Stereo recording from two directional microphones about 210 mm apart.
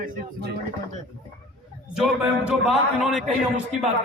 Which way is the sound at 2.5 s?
5° right (ahead or behind).